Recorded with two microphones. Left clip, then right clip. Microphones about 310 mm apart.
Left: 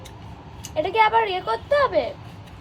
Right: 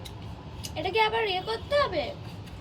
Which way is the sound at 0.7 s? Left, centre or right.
Centre.